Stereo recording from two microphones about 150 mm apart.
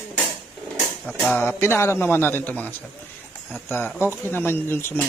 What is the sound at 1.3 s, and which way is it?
A man's voice, 15° left (ahead or behind).